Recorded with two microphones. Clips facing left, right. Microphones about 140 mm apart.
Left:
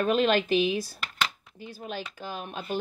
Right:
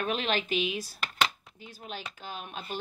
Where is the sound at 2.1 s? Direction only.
40° left (ahead or behind).